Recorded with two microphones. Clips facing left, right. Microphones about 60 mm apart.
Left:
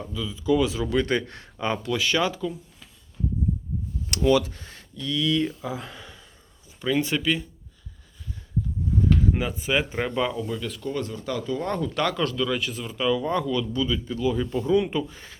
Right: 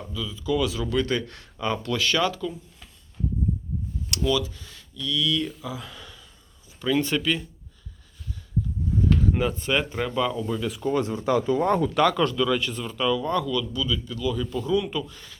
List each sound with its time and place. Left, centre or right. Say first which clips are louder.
0.1 s speech: left 3 dB; left
4.1 s speech: left 4 dB; left
6.8 s speech: even; centre
9.0 s a sound: right 1 dB; centre
10.2 s speech: right 2 dB; centre
10.5 s speech: right 4 dB; centre
11.9 s speech: right 4 dB; centre
13.1 s speech: even; centre
13.5 s speech: left 1 dB; left